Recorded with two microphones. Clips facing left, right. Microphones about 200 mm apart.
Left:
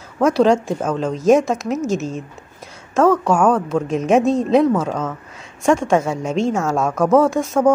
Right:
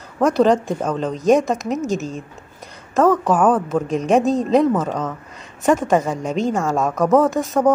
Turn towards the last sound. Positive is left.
turn(degrees=0)  # may be behind; listen again after turning